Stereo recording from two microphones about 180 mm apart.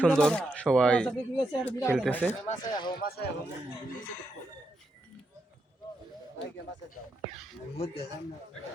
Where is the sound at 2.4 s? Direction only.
45° left (ahead or behind).